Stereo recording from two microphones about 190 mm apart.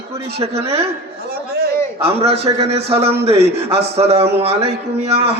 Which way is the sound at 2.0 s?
30° right (ahead or behind).